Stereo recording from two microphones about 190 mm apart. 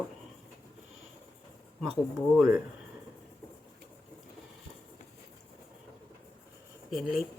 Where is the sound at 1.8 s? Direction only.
Centre (ahead or behind).